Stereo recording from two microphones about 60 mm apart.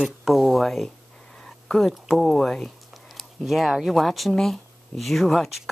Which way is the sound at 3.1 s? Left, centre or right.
Centre.